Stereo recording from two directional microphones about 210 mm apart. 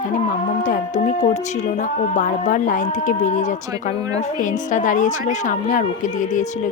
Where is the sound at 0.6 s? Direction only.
35° left (ahead or behind).